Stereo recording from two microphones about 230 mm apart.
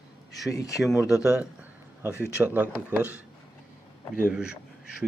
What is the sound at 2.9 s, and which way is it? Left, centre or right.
Speech, centre.